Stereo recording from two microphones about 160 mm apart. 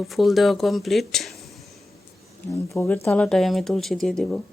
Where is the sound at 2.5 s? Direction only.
20° left (ahead or behind).